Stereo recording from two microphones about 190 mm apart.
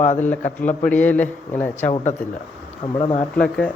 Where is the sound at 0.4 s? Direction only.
40° left (ahead or behind).